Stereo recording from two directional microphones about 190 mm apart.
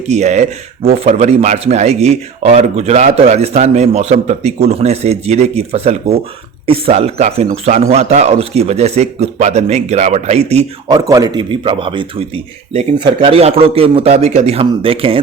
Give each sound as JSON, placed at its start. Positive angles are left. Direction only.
{"t": 0.1, "sound": "speech", "side_deg": -35}
{"t": 10.8, "sound": "speech", "side_deg": -20}